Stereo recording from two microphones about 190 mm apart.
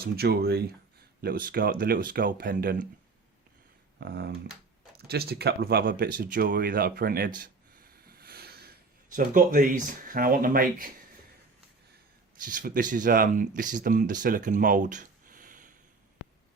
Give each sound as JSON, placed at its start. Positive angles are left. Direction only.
{"t": 0.0, "sound": "speech", "side_deg": -55}
{"t": 3.9, "sound": "speech", "side_deg": -60}
{"t": 8.0, "sound": "a sound", "side_deg": -55}
{"t": 12.5, "sound": "speech", "side_deg": -45}